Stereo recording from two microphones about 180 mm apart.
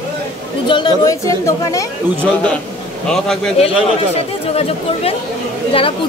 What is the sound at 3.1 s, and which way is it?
Speech, 5° left (ahead or behind).